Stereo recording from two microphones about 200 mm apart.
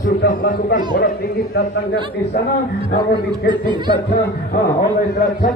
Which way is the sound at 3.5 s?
25° right (ahead or behind).